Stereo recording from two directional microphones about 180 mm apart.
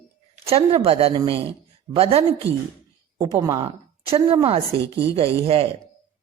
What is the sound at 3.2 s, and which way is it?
A woman's voice, 20° right (ahead or behind).